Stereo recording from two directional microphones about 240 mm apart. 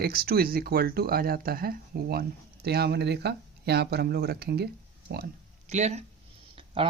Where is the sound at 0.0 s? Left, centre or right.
Right.